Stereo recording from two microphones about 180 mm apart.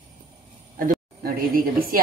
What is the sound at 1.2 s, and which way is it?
Speech, 55° right (ahead or behind).